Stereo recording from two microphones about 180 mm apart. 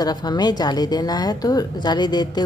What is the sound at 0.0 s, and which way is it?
A woman's voice, 20° left (ahead or behind).